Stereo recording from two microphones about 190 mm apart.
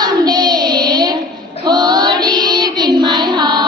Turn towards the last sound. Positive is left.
turn(degrees=-25)  # may be behind; listen again after turning